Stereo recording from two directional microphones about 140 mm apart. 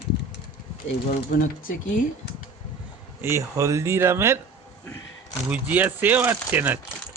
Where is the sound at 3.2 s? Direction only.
20° right (ahead or behind).